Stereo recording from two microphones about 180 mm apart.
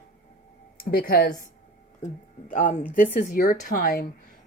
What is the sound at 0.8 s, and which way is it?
Speech, 55° left (ahead or behind).